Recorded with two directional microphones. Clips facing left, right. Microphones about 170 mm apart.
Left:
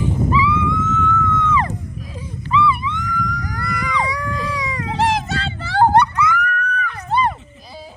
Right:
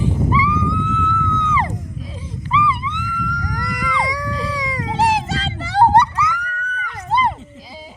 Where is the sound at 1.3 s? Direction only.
25° right (ahead or behind).